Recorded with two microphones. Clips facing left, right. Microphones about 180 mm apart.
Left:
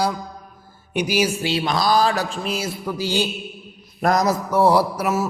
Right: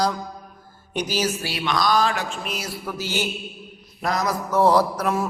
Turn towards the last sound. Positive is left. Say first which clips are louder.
# left 1 dB
turn(degrees=5)  # may be behind; listen again after turning